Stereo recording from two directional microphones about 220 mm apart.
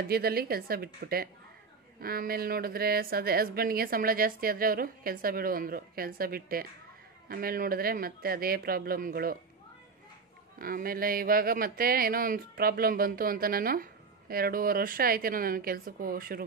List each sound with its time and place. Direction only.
0.1 s speech: 45° right (ahead or behind)
10.6 s speech: 40° right (ahead or behind)